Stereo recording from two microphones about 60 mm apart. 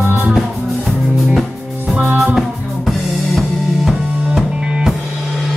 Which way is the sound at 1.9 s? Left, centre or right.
Right.